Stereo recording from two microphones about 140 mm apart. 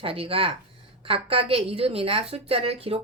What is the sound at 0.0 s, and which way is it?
A woman's voice, 40° right (ahead or behind).